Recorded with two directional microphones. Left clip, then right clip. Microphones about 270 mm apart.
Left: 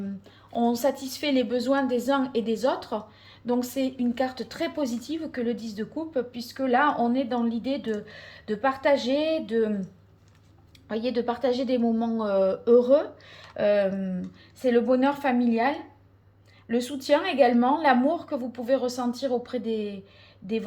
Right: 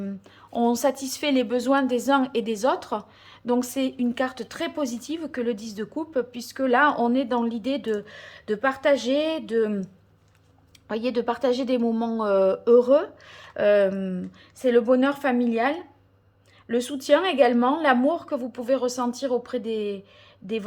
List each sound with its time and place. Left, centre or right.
0.5 s a woman's voice: centre
10.8 s a woman's voice: centre